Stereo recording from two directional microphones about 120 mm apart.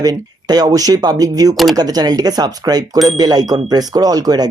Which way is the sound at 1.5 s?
Centre (ahead or behind).